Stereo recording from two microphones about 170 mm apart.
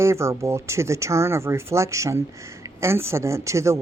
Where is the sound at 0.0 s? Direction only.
15° right (ahead or behind).